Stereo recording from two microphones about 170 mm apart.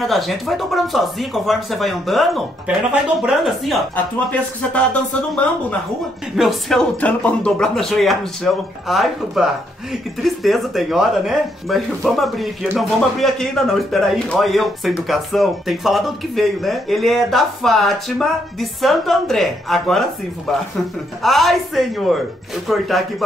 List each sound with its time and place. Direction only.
0.0 s a man's voice: centre (ahead or behind)